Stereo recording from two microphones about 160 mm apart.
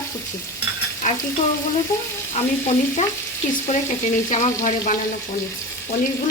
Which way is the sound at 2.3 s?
45° left (ahead or behind).